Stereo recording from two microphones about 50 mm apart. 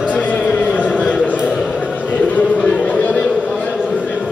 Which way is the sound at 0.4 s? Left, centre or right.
Left.